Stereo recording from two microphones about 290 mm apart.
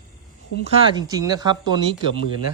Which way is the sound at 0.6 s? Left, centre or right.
Centre.